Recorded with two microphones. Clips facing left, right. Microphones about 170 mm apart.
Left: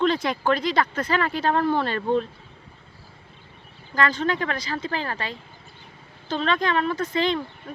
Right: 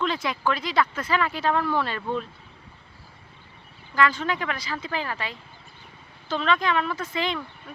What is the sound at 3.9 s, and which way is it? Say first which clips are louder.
Speech: left 1 dB; 40° left (ahead or behind).